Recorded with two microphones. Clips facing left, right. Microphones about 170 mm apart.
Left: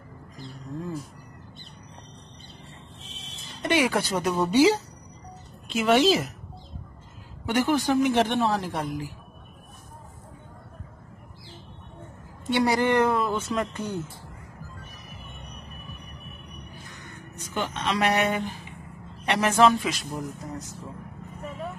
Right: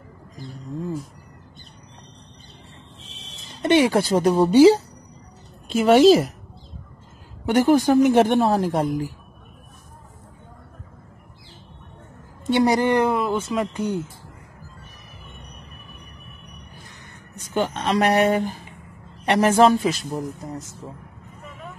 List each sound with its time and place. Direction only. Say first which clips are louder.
3.6 s speech: right 6 dB; 30° right (ahead or behind)
7.4 s speech: right 7 dB; 40° right (ahead or behind)
12.4 s a woman's voice: right 4 dB; 25° right (ahead or behind)
13.2 s speech: right 4 dB; 5° right (ahead or behind)
17.6 s a man's voice: right 6 dB; 40° right (ahead or behind)